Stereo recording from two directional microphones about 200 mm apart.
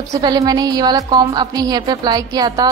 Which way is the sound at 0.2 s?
20° right (ahead or behind).